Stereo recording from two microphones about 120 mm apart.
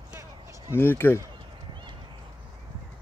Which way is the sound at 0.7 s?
20° left (ahead or behind).